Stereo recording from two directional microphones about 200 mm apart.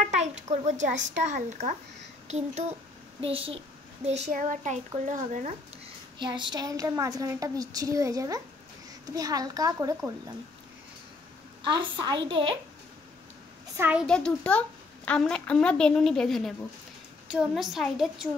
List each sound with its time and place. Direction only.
0.1 s a child's voice: 35° right (ahead or behind)
6.1 s a woman's voice: 25° right (ahead or behind)
11.6 s a woman's voice: 25° right (ahead or behind)
13.7 s a woman's voice: 10° right (ahead or behind)
14.0 s a woman's voice: 5° left (ahead or behind)